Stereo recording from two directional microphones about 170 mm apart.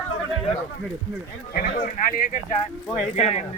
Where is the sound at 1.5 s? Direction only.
60° left (ahead or behind).